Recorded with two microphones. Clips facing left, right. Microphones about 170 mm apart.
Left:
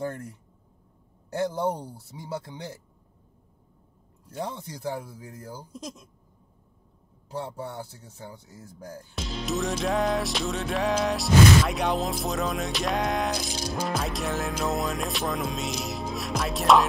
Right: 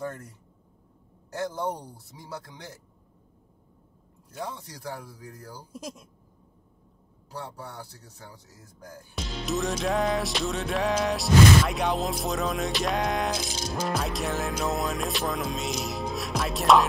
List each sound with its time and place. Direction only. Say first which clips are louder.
1.3 s speech: left 4 dB; 25° left (ahead or behind)
4.3 s speech: left 3 dB; 30° left (ahead or behind)
5.7 s speech: even; 10° right (ahead or behind)
7.3 s speech: left 5 dB; 25° left (ahead or behind)
9.1 s music: even; centre (ahead or behind)